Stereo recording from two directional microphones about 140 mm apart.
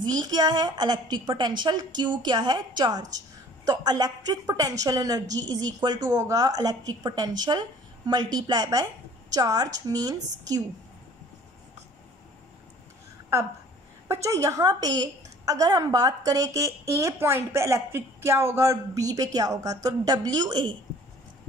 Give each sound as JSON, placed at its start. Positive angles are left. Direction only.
{"t": 0.0, "sound": "a woman's voice", "side_deg": -30}
{"t": 14.0, "sound": "speech", "side_deg": -20}